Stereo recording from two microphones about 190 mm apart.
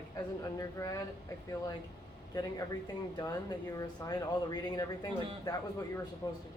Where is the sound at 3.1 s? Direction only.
20° left (ahead or behind).